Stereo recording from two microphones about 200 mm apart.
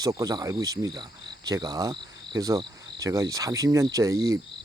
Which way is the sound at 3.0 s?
15° right (ahead or behind).